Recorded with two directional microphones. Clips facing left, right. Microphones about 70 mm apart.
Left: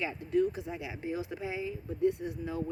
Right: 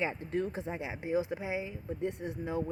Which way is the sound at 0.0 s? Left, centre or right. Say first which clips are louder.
Left 3 dB; right.